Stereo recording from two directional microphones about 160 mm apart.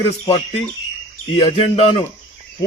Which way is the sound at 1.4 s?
40° left (ahead or behind).